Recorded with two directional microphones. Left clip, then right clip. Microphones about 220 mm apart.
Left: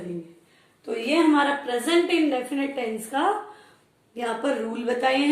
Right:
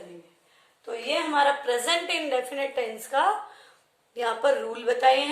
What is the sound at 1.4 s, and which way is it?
A woman's voice, 25° right (ahead or behind).